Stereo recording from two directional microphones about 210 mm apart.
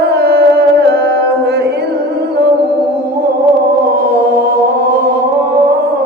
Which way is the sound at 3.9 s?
50° right (ahead or behind).